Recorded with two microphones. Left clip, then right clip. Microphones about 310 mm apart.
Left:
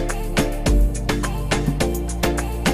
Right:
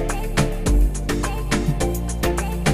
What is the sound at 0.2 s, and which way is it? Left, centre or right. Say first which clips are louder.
Music: left 1 dB; centre.